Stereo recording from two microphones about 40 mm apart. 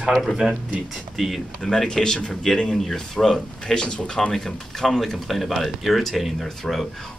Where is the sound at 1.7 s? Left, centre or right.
Centre.